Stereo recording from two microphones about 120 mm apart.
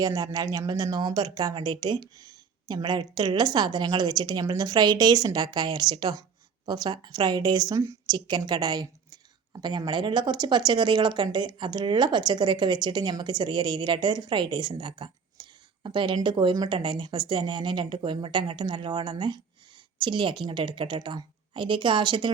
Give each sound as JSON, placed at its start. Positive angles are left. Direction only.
{"t": 0.0, "sound": "a woman's voice", "side_deg": -25}